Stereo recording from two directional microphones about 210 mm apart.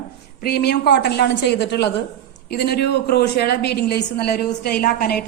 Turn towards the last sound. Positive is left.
turn(degrees=45)  # may be behind; listen again after turning